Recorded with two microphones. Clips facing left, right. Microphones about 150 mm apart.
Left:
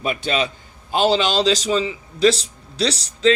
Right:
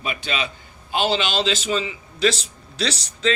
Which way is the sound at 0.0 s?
45° left (ahead or behind).